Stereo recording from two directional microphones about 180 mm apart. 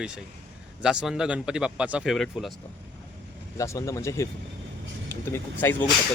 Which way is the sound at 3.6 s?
15° left (ahead or behind).